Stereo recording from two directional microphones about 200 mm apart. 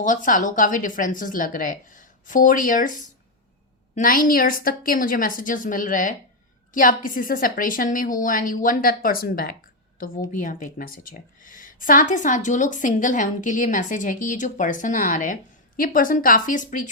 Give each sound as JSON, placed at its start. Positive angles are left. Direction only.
{"t": 0.0, "sound": "a woman's voice", "side_deg": 40}
{"t": 3.9, "sound": "a woman's voice", "side_deg": 45}